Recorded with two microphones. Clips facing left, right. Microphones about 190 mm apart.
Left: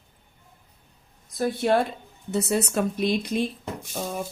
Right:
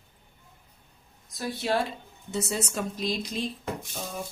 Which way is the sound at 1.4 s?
55° left (ahead or behind).